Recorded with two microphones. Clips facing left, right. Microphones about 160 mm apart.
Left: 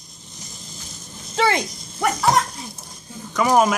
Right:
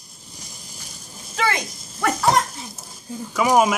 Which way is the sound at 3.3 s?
5° right (ahead or behind).